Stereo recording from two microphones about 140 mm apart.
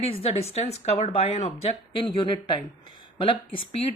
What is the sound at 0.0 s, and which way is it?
Speech, 45° left (ahead or behind).